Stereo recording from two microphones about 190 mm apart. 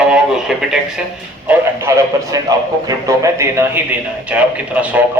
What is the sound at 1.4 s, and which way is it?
A man's voice, 15° right (ahead or behind).